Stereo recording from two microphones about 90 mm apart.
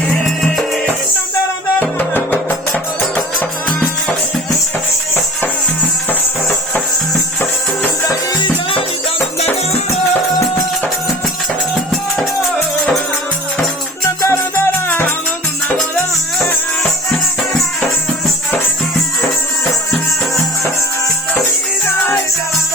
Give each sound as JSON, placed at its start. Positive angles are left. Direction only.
{"t": 1.8, "sound": "music", "side_deg": 20}
{"t": 14.2, "sound": "music", "side_deg": 25}